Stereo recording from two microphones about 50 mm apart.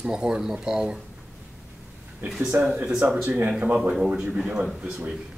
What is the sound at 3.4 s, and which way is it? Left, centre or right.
Speech, right.